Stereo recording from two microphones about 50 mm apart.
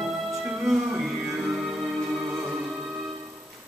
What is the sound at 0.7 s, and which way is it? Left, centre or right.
Music, centre.